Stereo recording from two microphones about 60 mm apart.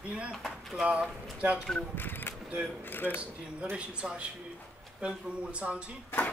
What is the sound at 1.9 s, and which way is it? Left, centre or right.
Speech, left.